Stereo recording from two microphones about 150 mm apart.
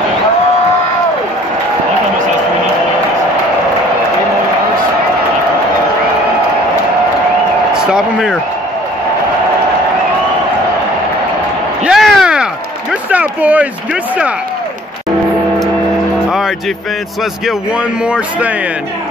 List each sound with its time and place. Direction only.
7.7 s speech: 5° right (ahead or behind)
11.8 s a sound: centre (ahead or behind)
13.1 s speech: 10° right (ahead or behind)
16.3 s vehicle: centre (ahead or behind)
17.5 s speech: 5° right (ahead or behind)